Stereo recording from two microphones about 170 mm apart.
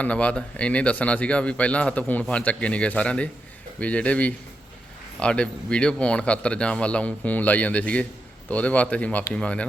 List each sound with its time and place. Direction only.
0.0 s speech: 5° left (ahead or behind)